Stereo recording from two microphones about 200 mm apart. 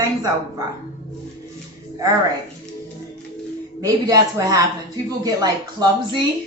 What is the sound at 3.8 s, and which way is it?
A woman's voice, 20° right (ahead or behind).